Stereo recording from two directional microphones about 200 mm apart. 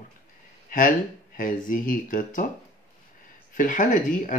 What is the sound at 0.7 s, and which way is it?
Speech, 45° left (ahead or behind).